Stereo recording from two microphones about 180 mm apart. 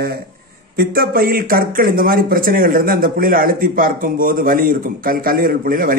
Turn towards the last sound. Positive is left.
turn(degrees=-50)  # may be behind; listen again after turning